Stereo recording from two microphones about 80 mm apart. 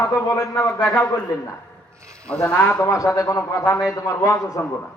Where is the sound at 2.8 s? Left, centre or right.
Left.